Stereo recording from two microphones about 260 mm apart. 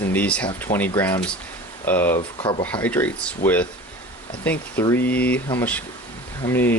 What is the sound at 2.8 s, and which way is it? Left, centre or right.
Speech, centre.